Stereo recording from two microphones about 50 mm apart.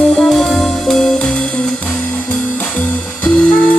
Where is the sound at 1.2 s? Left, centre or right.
Centre.